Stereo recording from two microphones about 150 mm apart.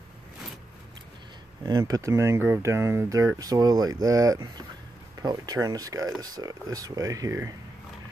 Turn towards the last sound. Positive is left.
turn(degrees=-20)  # may be behind; listen again after turning